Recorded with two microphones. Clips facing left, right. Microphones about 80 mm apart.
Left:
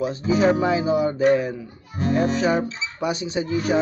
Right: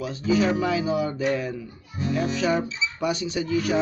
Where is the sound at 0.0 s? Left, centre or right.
Left.